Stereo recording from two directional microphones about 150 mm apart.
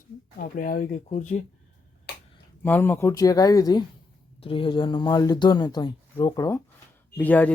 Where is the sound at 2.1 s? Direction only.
90° left.